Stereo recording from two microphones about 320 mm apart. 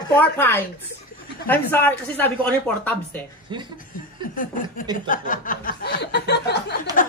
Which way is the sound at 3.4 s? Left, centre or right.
Centre.